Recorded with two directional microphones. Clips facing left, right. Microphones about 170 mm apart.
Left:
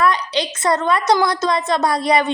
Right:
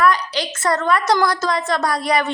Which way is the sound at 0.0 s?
20° left (ahead or behind).